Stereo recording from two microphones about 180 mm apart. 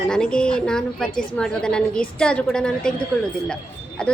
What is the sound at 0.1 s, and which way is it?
A woman's voice, 5° left (ahead or behind).